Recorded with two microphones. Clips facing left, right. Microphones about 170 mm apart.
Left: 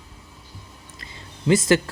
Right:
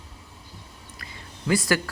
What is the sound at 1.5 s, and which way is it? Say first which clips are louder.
Speech: left 5 dB; 25° left (ahead or behind).